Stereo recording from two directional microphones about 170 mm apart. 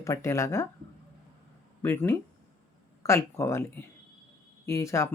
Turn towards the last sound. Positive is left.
turn(degrees=15)  # may be behind; listen again after turning